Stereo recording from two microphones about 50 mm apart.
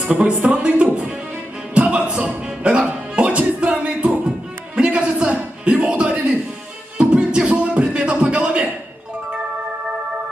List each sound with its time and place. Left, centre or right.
0.0 s speech: centre
1.9 s music: right